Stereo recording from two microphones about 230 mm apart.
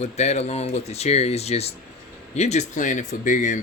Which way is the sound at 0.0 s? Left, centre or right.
Left.